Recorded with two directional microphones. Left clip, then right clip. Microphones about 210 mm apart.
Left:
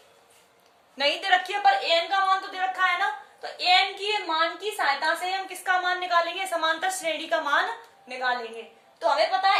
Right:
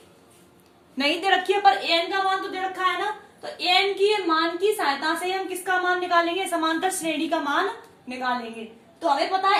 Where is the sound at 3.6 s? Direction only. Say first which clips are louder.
Right 2 dB; 30° left (ahead or behind).